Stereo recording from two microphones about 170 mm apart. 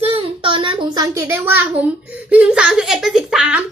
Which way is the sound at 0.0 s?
30° right (ahead or behind).